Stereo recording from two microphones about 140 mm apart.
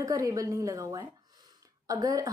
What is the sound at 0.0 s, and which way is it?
A woman's voice, 25° right (ahead or behind).